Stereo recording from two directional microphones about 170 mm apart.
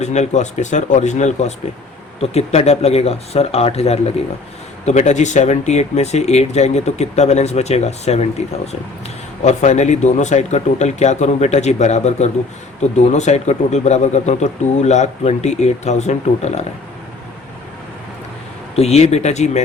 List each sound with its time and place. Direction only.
0.0 s speech: 40° left (ahead or behind)
18.8 s speech: 40° left (ahead or behind)